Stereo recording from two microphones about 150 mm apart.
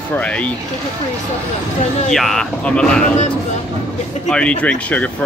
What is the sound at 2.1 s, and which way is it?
Speech, centre (ahead or behind).